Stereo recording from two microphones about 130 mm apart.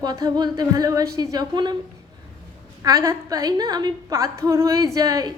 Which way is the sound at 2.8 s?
30° right (ahead or behind).